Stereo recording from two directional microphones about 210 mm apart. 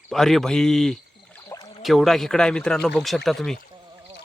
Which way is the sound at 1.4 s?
15° left (ahead or behind).